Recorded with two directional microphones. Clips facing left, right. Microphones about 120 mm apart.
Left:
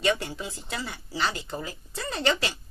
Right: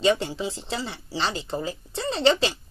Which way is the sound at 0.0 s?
25° right (ahead or behind).